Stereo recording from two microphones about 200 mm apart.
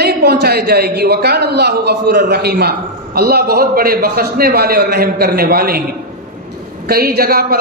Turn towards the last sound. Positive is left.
turn(degrees=-50)  # may be behind; listen again after turning